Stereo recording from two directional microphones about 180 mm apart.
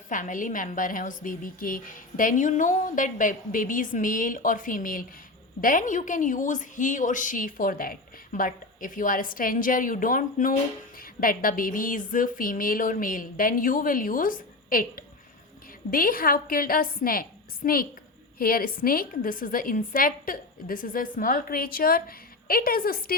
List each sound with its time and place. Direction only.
0.1 s a woman's voice: 45° left (ahead or behind)